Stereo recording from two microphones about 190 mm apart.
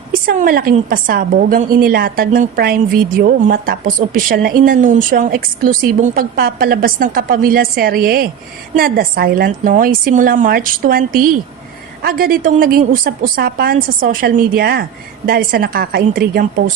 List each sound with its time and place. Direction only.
0.1 s a woman's voice: 50° right (ahead or behind)